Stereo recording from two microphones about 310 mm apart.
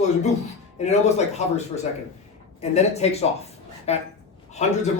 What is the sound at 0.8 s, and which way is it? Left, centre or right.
Speech, left.